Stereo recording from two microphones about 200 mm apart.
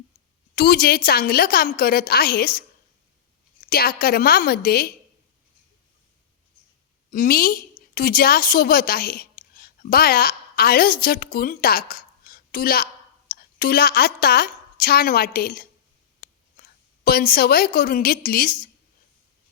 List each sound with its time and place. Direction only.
0.5 s a woman's voice: 50° left (ahead or behind)
3.7 s a woman's voice: 50° left (ahead or behind)
7.1 s a woman's voice: 45° left (ahead or behind)